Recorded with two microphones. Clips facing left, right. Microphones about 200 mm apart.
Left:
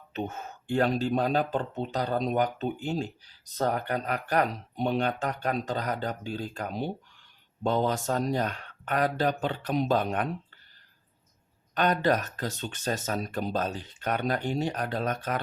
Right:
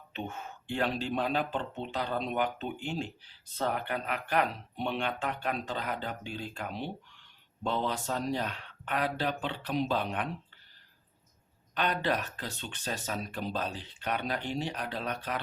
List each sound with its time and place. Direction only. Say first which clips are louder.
0.1 s speech: left 5 dB; 40° left (ahead or behind)
11.7 s speech: left 6 dB; 45° left (ahead or behind)